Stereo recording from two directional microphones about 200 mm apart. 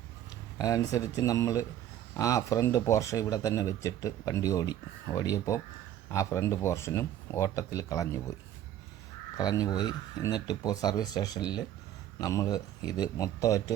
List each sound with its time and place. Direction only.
0.6 s speech: 15° left (ahead or behind)
9.4 s speech: 20° left (ahead or behind)